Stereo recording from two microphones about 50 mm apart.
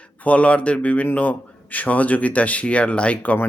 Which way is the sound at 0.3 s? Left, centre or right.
Left.